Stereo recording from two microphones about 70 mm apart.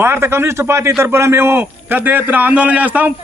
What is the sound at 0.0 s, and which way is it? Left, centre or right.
A man's voice, right.